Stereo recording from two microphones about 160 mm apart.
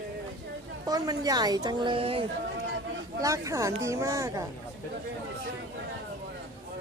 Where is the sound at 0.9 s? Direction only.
25° right (ahead or behind).